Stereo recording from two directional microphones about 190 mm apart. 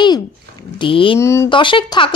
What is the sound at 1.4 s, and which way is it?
Speech, 25° left (ahead or behind).